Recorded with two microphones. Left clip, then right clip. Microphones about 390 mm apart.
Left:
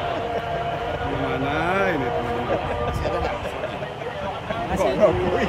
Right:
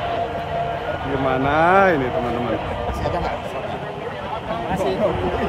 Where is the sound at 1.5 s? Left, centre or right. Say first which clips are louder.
Right 8 dB; centre.